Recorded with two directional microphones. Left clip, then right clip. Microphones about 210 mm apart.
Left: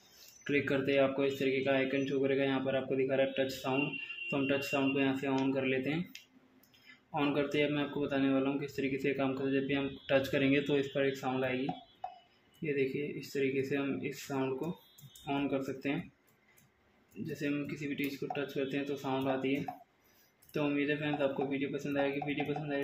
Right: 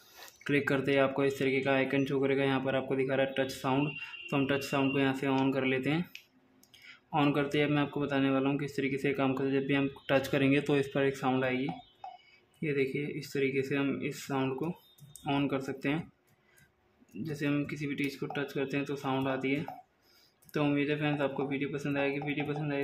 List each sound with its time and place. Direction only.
0.4 s speech: 20° right (ahead or behind)
12.6 s speech: 20° right (ahead or behind)
17.2 s speech: 20° right (ahead or behind)